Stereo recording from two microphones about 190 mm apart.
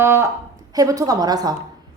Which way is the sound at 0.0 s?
15° right (ahead or behind).